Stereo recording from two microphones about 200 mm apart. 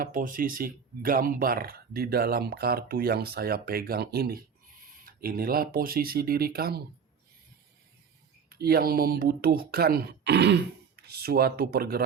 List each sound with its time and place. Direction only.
0.0 s speech: 45° right (ahead or behind)
8.4 s speech: 50° right (ahead or behind)